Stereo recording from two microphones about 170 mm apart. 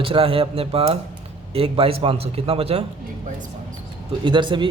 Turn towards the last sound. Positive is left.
turn(degrees=-30)  # may be behind; listen again after turning